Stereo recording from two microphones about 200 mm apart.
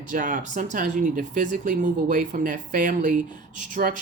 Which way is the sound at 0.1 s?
40° right (ahead or behind).